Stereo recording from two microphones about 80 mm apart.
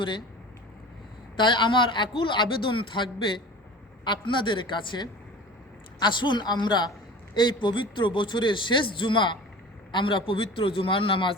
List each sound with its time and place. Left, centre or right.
1.4 s a man's voice: left